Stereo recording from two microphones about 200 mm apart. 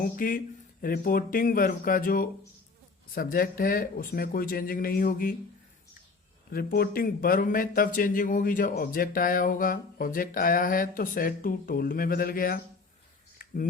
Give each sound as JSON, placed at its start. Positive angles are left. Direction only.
{"t": 0.0, "sound": "speech", "side_deg": 45}
{"t": 6.5, "sound": "speech", "side_deg": 50}
{"t": 13.4, "sound": "a sound", "side_deg": 45}